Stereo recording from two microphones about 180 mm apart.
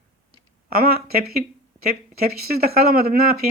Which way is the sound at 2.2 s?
60° right (ahead or behind).